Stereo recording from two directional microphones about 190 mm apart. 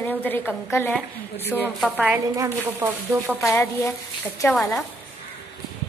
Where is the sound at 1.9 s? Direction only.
10° right (ahead or behind).